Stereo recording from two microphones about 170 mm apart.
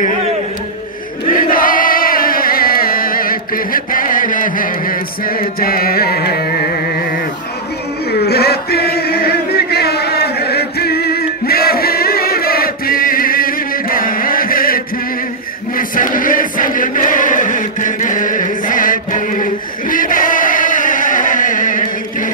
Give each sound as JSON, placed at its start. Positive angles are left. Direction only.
{"t": 1.3, "sound": "chant", "side_deg": 55}
{"t": 8.1, "sound": "chant", "side_deg": 70}